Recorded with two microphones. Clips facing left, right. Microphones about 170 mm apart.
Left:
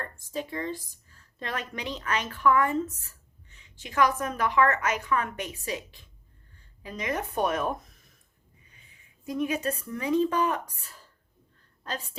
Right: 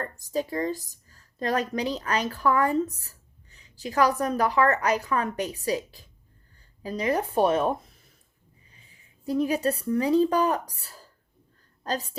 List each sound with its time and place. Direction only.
0.0 s a woman's voice: 40° right (ahead or behind)